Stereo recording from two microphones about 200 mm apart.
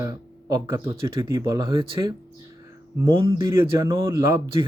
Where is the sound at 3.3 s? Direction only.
15° right (ahead or behind).